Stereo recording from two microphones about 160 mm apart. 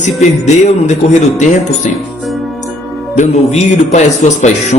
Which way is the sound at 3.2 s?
45° left (ahead or behind).